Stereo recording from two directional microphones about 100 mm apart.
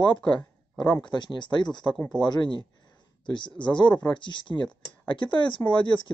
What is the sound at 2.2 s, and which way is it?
Speech, 50° left (ahead or behind).